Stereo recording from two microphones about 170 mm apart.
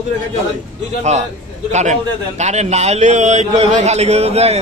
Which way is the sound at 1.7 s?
45° right (ahead or behind).